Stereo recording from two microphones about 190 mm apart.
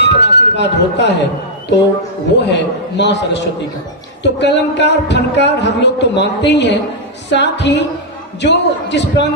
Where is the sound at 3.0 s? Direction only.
65° left (ahead or behind).